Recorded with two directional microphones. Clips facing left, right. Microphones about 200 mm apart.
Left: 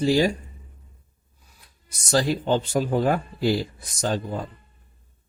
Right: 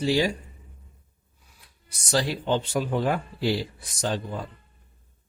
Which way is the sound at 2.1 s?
45° left (ahead or behind).